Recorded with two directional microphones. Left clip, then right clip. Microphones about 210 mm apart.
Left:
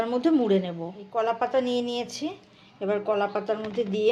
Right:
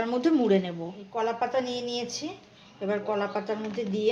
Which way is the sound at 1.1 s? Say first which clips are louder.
Left 3 dB; 35° left (ahead or behind).